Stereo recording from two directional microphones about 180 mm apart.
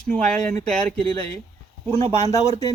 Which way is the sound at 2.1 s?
35° right (ahead or behind).